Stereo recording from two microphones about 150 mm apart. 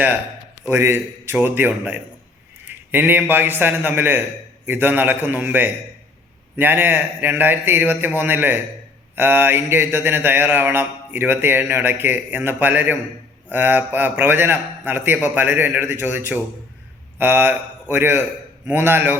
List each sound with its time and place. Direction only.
0.7 s mantra: 15° right (ahead or behind)
17.2 s a man's voice: 15° right (ahead or behind)
18.7 s mantra: 15° right (ahead or behind)